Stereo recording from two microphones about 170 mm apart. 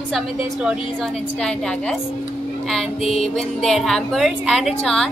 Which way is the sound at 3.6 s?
Centre (ahead or behind).